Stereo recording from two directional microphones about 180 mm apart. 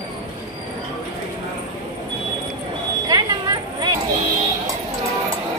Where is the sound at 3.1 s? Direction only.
20° right (ahead or behind).